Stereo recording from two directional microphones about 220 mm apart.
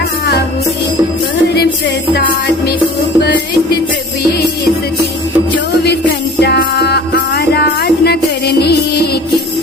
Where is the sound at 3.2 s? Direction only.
45° left (ahead or behind).